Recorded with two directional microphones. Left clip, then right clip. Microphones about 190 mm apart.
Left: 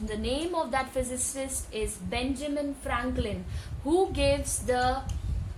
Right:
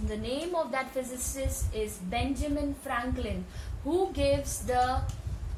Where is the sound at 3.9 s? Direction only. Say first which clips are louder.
Left 2 dB; 40° left (ahead or behind).